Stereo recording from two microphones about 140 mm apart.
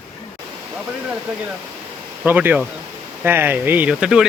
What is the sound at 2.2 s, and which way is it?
Speech, 10° right (ahead or behind).